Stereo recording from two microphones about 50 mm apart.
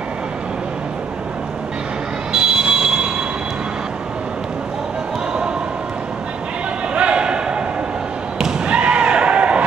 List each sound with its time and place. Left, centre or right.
2.3 s train: centre
6.9 s a sound: right
8.4 s slam: centre